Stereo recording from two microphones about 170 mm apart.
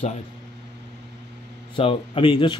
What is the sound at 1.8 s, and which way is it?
Speech, 30° left (ahead or behind).